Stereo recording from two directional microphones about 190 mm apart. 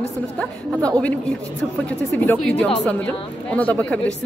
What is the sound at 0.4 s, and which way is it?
A woman's voice, 5° left (ahead or behind).